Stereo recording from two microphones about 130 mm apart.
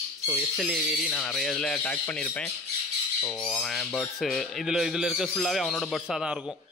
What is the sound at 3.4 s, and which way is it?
A man's voice, 5° left (ahead or behind).